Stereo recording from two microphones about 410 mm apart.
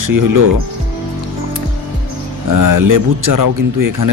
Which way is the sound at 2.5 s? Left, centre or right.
Right.